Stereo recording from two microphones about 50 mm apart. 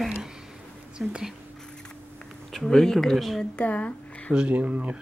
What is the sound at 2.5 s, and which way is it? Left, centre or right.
Speech, centre.